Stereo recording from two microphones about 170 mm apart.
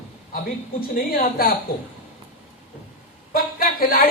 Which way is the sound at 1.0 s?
60° left (ahead or behind).